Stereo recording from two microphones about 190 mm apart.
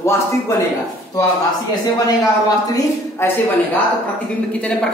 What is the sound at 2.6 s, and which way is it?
Speech, 20° left (ahead or behind).